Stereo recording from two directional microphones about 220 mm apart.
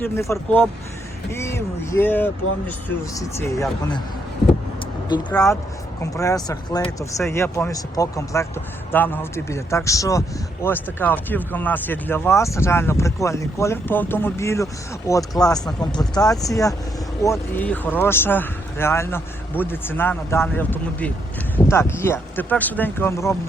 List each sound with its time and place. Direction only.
0.0 s speech: 10° left (ahead or behind)
5.3 s speech: 15° left (ahead or behind)